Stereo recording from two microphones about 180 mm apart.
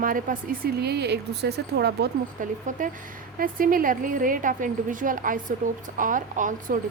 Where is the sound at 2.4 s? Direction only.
45° right (ahead or behind).